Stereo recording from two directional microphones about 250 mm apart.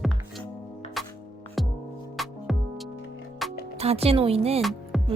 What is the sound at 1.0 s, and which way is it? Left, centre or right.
Music, centre.